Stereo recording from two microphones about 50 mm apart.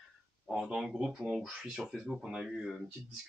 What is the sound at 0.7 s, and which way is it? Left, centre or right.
Speech, centre.